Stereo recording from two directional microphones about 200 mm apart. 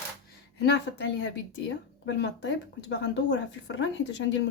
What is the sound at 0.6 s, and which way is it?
A woman's voice, 65° left (ahead or behind).